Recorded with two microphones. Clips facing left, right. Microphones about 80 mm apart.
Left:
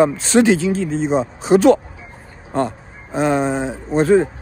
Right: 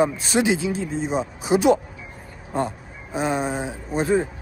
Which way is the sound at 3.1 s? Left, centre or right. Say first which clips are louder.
Left 6 dB; left.